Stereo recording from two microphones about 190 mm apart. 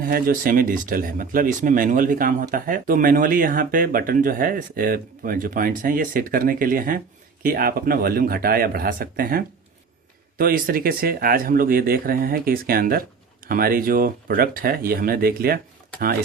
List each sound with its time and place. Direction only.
0.1 s speech: 50° right (ahead or behind)